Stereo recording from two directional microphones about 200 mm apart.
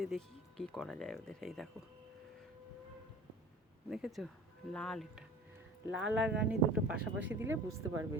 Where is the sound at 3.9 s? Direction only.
Centre (ahead or behind).